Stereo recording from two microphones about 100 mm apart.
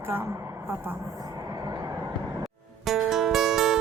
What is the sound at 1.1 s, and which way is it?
Music, 35° right (ahead or behind).